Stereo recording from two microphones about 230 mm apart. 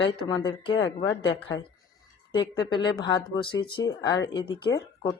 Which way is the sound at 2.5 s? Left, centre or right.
Centre.